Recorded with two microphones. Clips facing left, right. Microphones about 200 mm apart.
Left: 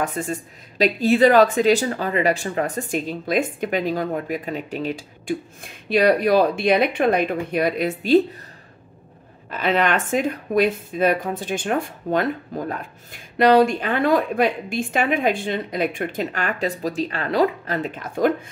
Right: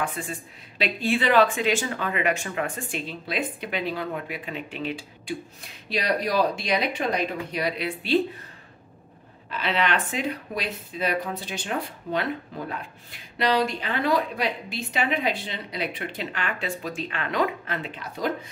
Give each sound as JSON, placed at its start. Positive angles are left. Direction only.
{"t": 0.0, "sound": "speech", "side_deg": 40}
{"t": 9.5, "sound": "speech", "side_deg": 45}